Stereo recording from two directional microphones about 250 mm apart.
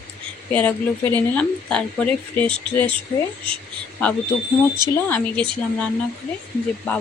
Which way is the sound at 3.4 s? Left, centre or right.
Right.